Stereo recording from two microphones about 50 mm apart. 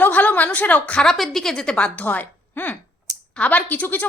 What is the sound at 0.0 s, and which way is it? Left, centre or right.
Speech, left.